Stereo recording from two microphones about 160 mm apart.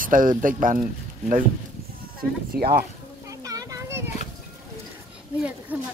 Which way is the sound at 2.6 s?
70° right (ahead or behind).